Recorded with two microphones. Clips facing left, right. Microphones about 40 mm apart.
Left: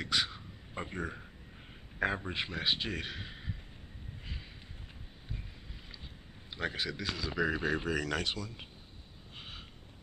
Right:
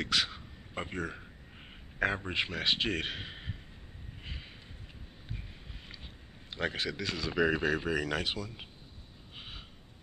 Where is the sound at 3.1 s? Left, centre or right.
Right.